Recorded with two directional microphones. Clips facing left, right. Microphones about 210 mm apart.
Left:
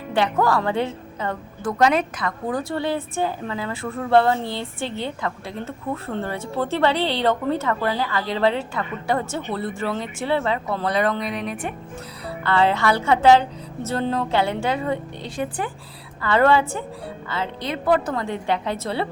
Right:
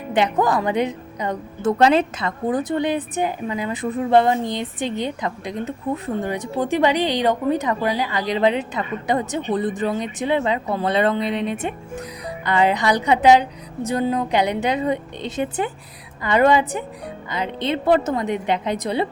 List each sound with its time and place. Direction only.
0.1 s a woman's voice: 20° right (ahead or behind)
1.8 s a woman's voice: 30° right (ahead or behind)